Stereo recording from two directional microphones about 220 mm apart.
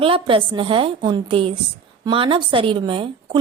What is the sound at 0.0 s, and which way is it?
A woman's voice, 25° right (ahead or behind).